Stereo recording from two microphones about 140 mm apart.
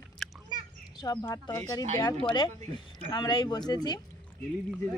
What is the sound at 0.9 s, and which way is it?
Speech, 25° left (ahead or behind).